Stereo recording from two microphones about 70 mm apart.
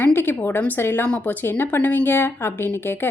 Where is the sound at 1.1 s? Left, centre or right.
Centre.